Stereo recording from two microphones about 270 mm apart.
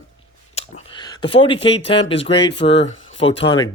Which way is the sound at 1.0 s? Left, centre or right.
Centre.